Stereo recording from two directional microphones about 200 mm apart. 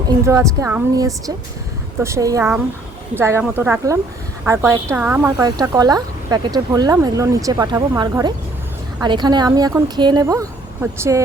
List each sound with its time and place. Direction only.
0.3 s a woman's voice: 15° right (ahead or behind)